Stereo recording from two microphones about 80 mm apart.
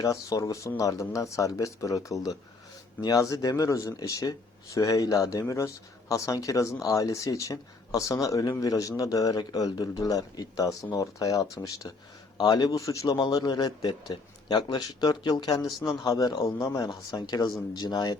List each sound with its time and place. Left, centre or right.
0.0 s speech: left
12.4 s speech: left
13.3 s speech: left
16.6 s speech: left
17.1 s speech: left